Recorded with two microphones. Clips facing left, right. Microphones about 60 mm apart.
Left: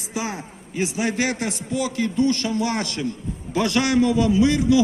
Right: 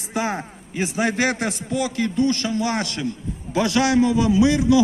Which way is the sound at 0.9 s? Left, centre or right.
Right.